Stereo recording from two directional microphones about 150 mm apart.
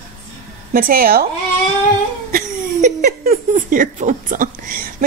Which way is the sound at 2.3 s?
60° right (ahead or behind).